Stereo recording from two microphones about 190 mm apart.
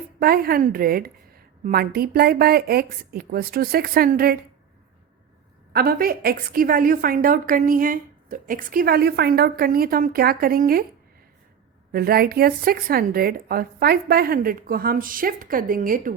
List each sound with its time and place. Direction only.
0.2 s a woman's voice: 55° right (ahead or behind)
5.7 s a woman's voice: 55° right (ahead or behind)
11.9 s a woman's voice: 55° right (ahead or behind)